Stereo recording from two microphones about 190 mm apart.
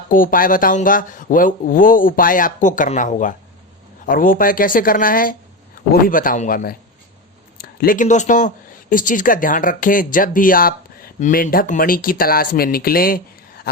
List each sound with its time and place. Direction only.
0.1 s speech: 45° left (ahead or behind)